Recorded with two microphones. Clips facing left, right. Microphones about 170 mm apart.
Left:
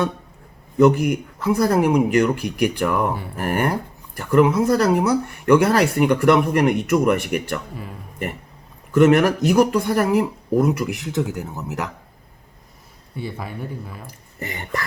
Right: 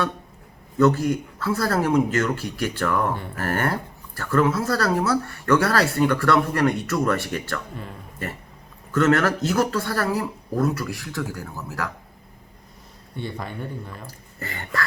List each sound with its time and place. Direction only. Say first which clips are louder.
0.8 s speech: left 3 dB; 20° left (ahead or behind)
13.1 s speech: left 1 dB; 5° left (ahead or behind)
14.3 s speech: left 1 dB; 20° left (ahead or behind)